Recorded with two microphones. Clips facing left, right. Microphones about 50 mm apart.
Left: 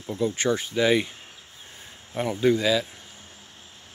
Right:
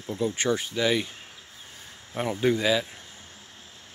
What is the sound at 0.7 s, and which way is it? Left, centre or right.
Cricket, centre.